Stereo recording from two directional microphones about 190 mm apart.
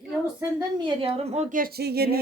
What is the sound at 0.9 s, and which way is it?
Speech, 30° right (ahead or behind).